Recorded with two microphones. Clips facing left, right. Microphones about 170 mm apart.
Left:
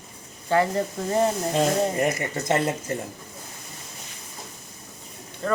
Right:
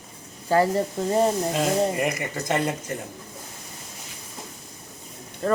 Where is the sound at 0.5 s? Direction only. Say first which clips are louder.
Right 1 dB; 35° right (ahead or behind).